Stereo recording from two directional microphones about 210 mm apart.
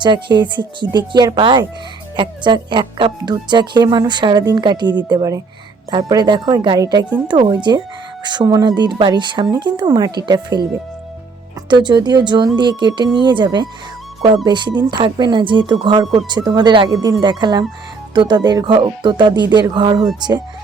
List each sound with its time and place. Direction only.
0.0 s speech: 20° right (ahead or behind)
11.7 s speech: 20° right (ahead or behind)